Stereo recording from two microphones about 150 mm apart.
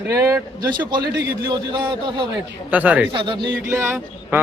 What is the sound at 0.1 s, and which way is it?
A man's voice, 20° right (ahead or behind).